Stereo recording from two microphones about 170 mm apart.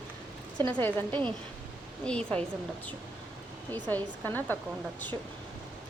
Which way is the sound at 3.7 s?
10° left (ahead or behind).